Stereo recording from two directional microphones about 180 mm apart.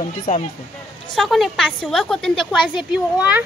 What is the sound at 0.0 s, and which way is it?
Speech, 35° left (ahead or behind).